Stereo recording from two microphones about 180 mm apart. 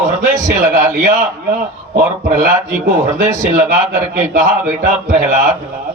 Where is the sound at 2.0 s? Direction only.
50° right (ahead or behind).